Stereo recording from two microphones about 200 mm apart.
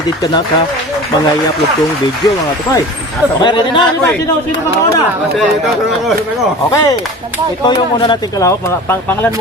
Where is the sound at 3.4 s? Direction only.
25° left (ahead or behind).